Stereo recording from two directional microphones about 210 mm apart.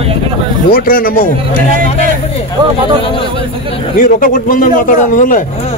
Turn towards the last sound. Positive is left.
turn(degrees=40)  # may be behind; listen again after turning